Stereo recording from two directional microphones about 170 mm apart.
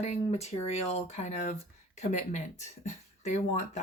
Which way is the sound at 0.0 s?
40° left (ahead or behind).